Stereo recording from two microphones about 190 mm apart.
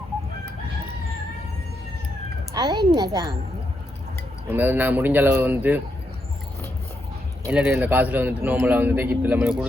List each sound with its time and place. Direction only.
2.5 s a woman's voice: 20° right (ahead or behind)
4.4 s a man's voice: 10° right (ahead or behind)
7.5 s a man's voice: 5° right (ahead or behind)